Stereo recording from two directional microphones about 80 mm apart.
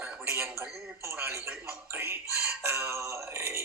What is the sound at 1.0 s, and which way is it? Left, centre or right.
A man's voice, right.